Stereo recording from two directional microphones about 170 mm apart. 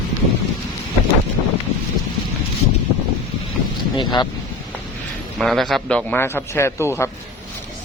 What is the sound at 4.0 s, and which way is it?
Vehicle, 25° left (ahead or behind).